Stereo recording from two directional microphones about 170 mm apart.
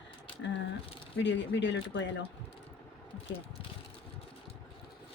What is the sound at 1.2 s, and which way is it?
Speech, 90° left.